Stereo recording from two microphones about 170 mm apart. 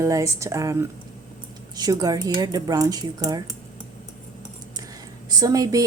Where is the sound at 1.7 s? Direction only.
20° right (ahead or behind).